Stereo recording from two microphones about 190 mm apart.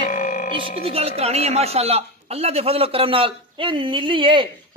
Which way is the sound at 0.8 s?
30° right (ahead or behind).